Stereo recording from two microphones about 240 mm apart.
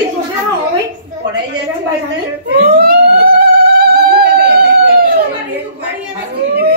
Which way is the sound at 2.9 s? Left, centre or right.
Right.